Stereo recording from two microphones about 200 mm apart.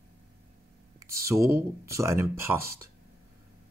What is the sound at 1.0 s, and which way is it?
Speech, 15° right (ahead or behind).